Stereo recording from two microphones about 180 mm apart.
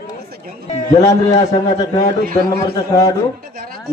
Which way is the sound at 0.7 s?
40° left (ahead or behind).